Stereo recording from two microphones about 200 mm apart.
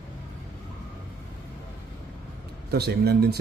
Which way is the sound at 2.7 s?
50° right (ahead or behind).